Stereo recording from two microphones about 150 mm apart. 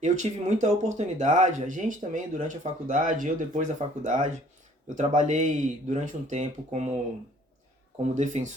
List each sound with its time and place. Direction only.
0.0 s speech: 55° right (ahead or behind)
8.1 s speech: 55° right (ahead or behind)